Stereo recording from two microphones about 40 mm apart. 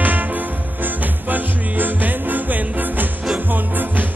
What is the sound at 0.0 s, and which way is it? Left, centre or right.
Music, right.